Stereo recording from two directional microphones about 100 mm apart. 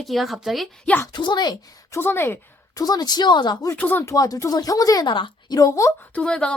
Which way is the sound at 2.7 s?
40° left (ahead or behind).